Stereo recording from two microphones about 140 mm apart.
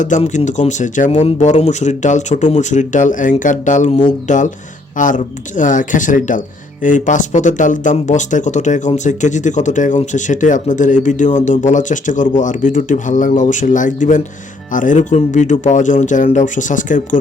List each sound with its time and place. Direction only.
0.3 s speech: 60° left (ahead or behind)